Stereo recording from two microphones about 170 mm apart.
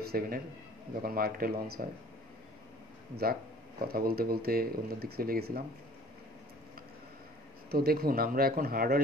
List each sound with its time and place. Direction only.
0.0 s a man's voice: 65° right (ahead or behind)
3.9 s speech: 60° right (ahead or behind)
7.7 s speech: 65° right (ahead or behind)